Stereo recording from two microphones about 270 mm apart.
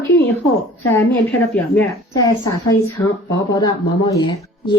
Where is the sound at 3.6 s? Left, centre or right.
Centre.